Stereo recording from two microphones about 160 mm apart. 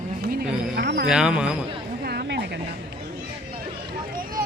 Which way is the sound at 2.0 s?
75° right (ahead or behind).